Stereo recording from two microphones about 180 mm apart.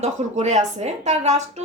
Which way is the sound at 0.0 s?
40° right (ahead or behind).